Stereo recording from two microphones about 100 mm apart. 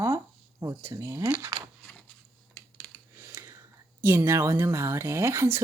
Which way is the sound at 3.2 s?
25° right (ahead or behind).